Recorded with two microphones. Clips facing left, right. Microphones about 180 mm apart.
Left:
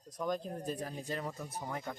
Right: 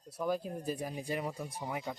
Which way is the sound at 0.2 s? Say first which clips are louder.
Right 2 dB; 10° right (ahead or behind).